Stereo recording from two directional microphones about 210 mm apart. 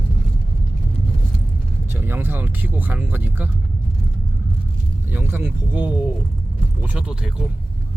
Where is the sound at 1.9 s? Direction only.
10° right (ahead or behind).